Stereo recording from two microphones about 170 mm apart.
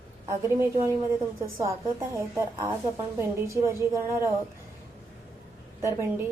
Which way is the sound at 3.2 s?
15° right (ahead or behind).